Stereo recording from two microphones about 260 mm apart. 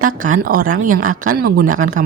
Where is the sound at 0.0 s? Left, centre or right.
Right.